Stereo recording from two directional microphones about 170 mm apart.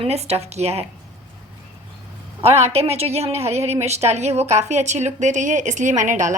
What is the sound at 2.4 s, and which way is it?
A woman's voice, 40° right (ahead or behind).